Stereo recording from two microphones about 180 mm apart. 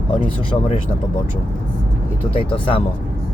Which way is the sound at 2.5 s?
30° left (ahead or behind).